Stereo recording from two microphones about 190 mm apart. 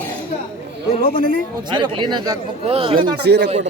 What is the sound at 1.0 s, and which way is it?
Speech, 50° left (ahead or behind).